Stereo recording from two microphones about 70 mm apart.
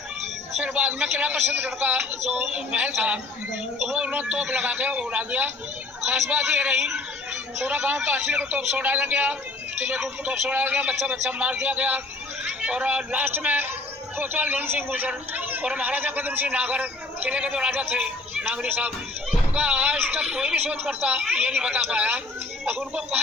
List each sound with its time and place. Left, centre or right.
0.6 s a man's voice: right
3.9 s a man's voice: right
6.1 s a man's voice: right